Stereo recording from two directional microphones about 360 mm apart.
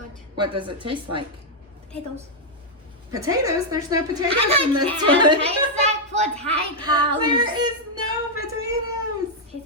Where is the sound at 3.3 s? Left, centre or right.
Centre.